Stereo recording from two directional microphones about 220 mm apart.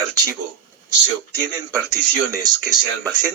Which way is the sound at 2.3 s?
15° right (ahead or behind).